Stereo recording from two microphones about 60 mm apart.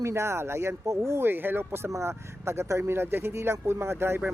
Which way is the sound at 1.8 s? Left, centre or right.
Right.